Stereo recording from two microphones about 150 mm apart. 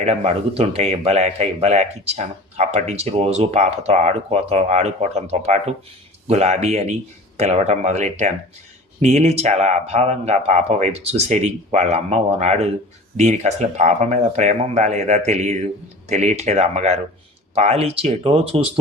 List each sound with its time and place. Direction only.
0.0 s speech: 45° right (ahead or behind)